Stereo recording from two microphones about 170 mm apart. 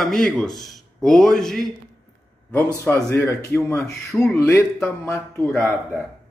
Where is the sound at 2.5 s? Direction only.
15° left (ahead or behind).